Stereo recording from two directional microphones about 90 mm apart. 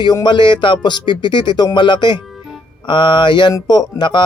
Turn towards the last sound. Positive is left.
turn(degrees=55)  # may be behind; listen again after turning